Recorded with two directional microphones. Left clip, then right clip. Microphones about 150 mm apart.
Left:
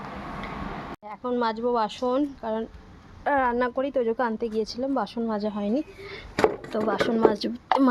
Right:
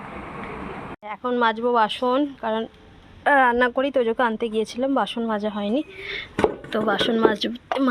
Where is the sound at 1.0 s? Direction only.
5° right (ahead or behind).